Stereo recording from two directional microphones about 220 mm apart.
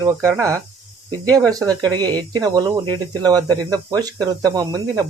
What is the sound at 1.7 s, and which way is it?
Speech, 20° right (ahead or behind).